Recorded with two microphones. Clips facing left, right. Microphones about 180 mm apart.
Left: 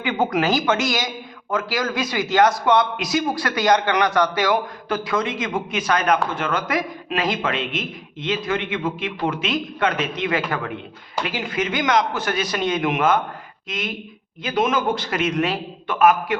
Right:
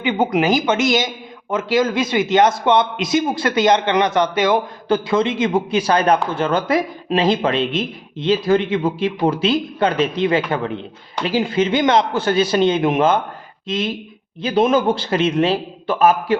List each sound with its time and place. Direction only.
0.0 s a man's voice: 20° right (ahead or behind)